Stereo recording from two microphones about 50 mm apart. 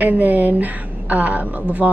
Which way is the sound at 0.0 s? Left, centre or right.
Right.